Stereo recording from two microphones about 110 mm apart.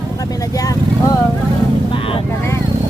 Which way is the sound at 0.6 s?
35° left (ahead or behind).